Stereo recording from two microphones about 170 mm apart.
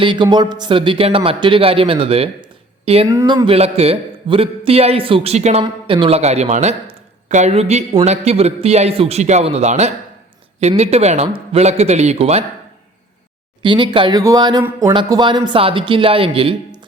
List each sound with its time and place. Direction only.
0.0 s speech: 30° right (ahead or behind)
3.1 s speech: 20° right (ahead or behind); by 12.5 s 40° right (ahead or behind)
13.6 s speech: 30° right (ahead or behind)
14.9 s speech: 25° right (ahead or behind)